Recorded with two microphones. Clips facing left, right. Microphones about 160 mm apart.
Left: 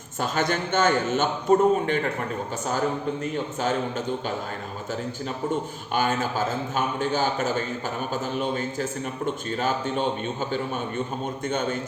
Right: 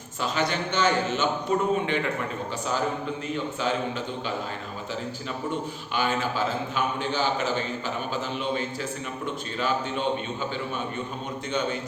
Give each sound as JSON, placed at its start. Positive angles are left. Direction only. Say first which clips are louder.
{"t": 0.2, "sound": "a man's voice", "louder": "left 2 dB", "side_deg": 50}
{"t": 3.6, "sound": "a man's voice", "louder": "left 3 dB", "side_deg": 45}
{"t": 5.9, "sound": "a man's voice", "louder": "left 2 dB", "side_deg": 45}
{"t": 11.4, "sound": "a man's voice", "louder": "left 1 dB", "side_deg": 50}